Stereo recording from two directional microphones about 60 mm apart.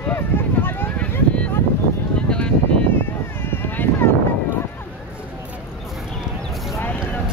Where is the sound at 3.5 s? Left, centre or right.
Left.